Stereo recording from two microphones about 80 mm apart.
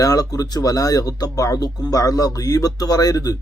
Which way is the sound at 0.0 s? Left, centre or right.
Left.